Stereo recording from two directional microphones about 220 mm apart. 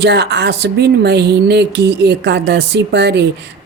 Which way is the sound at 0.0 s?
50° right (ahead or behind).